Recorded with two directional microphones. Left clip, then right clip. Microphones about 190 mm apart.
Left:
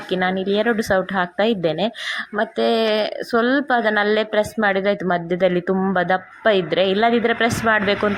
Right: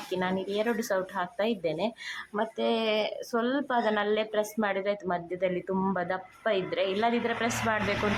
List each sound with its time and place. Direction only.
0.1 s a woman's voice: 20° left (ahead or behind)